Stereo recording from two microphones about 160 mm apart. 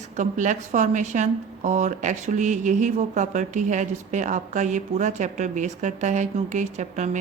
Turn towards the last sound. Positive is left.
turn(degrees=-50)  # may be behind; listen again after turning